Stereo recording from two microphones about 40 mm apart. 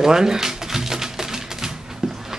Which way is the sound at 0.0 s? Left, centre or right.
Centre.